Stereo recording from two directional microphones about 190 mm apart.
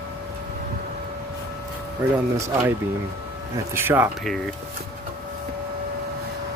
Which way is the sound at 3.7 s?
10° right (ahead or behind).